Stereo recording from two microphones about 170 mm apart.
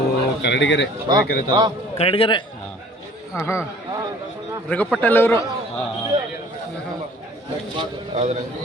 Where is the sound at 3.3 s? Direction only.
15° left (ahead or behind).